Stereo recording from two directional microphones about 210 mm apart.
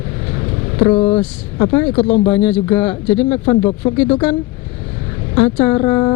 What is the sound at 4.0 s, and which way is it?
Speech, 10° left (ahead or behind).